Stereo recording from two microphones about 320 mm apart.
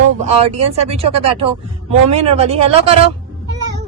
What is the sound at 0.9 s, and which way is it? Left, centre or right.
Speech, centre.